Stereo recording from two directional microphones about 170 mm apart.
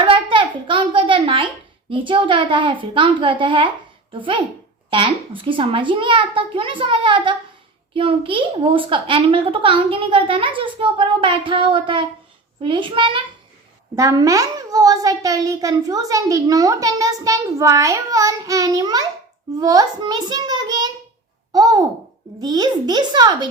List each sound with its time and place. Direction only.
0.0 s a sound: 30° right (ahead or behind)
1.9 s a child's voice: 30° right (ahead or behind)
13.9 s a child's voice: 20° right (ahead or behind)